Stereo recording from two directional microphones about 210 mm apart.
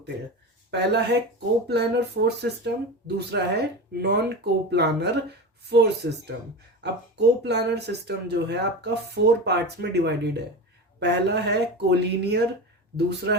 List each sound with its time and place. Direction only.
0.7 s speech: 55° right (ahead or behind)